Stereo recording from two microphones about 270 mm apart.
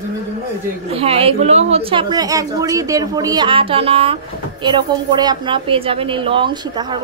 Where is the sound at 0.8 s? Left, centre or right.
Right.